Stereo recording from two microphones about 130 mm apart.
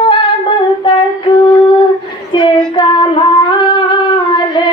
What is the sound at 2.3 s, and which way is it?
Child singing, 35° left (ahead or behind).